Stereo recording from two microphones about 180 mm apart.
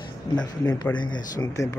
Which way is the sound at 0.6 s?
20° left (ahead or behind).